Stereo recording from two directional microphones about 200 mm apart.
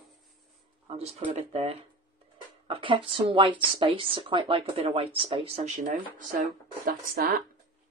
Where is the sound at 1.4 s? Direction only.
30° right (ahead or behind).